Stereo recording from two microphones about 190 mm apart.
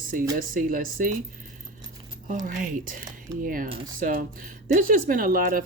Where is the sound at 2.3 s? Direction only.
45° right (ahead or behind).